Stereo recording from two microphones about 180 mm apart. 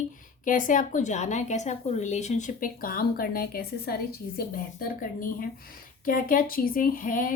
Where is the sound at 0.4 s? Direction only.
45° left (ahead or behind).